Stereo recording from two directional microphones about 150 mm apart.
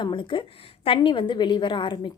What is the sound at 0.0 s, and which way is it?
A woman's voice, 35° left (ahead or behind).